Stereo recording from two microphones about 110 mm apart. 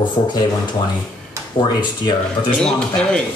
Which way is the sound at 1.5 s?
45° left (ahead or behind).